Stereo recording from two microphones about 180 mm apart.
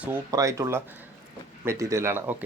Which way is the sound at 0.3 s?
20° right (ahead or behind).